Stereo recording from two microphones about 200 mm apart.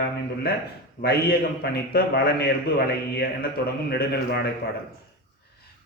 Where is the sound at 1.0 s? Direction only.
50° left (ahead or behind).